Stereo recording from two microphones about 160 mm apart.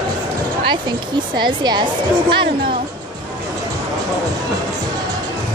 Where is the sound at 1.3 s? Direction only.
30° right (ahead or behind).